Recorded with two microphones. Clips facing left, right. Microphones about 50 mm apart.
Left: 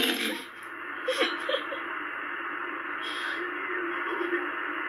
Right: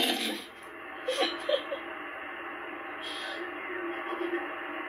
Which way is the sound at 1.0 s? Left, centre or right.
Left.